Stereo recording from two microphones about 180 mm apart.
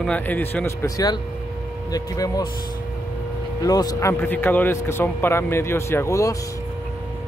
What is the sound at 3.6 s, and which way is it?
Speech, 20° left (ahead or behind).